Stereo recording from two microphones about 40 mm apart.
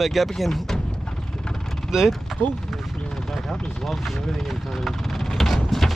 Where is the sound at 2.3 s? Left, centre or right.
Centre.